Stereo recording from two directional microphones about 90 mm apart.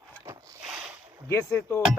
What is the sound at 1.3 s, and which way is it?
Speech, 30° left (ahead or behind).